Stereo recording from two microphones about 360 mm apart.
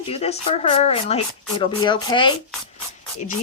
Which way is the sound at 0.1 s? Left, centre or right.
Centre.